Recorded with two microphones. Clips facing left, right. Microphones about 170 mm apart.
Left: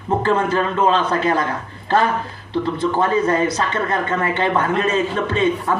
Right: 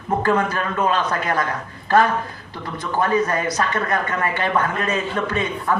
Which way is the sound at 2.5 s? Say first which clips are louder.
Left 6 dB; 25° left (ahead or behind).